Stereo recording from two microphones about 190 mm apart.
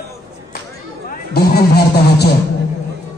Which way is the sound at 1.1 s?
55° left (ahead or behind).